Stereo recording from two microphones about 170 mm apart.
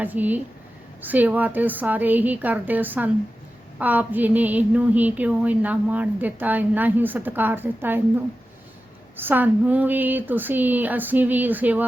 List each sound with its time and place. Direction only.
0.0 s a woman's voice: 10° right (ahead or behind)
9.1 s a woman's voice: 10° right (ahead or behind)